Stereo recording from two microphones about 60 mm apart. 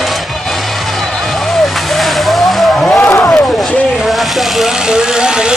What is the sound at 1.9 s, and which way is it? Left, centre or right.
Vehicle, centre.